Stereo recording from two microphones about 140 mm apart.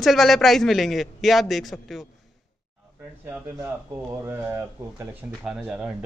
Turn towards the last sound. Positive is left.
turn(degrees=-5)  # may be behind; listen again after turning